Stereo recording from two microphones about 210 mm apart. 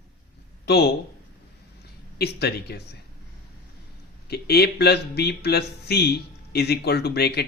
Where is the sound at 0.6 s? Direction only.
50° left (ahead or behind).